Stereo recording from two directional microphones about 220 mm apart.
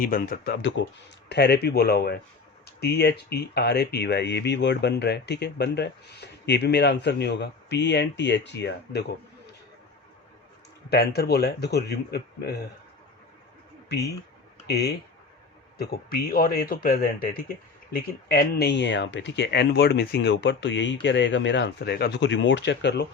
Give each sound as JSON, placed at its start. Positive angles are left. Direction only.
{"t": 0.0, "sound": "speech", "side_deg": 40}
{"t": 10.8, "sound": "speech", "side_deg": 45}
{"t": 13.8, "sound": "speech", "side_deg": 45}